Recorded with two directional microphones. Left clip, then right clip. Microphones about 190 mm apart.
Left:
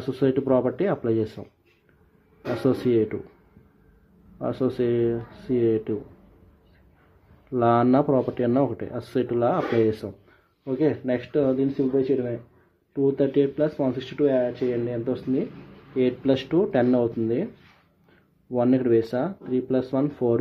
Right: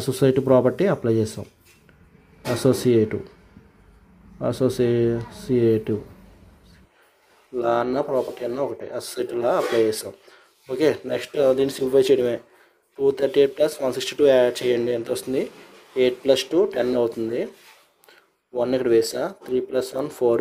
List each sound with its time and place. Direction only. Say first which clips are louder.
0.0 s speech: right 4 dB; 10° right (ahead or behind)
2.6 s speech: right 3 dB; 5° right (ahead or behind)
4.4 s speech: right 4 dB; 5° right (ahead or behind)
7.5 s speech: left 2 dB; 10° right (ahead or behind)
10.8 s speech: right 3 dB; 25° right (ahead or behind)
13.0 s speech: right 3 dB; 25° right (ahead or behind)
14.2 s speech: right 6 dB; 35° right (ahead or behind)
16.0 s speech: right 4 dB; 15° right (ahead or behind)
18.6 s speech: right 2 dB; 15° right (ahead or behind)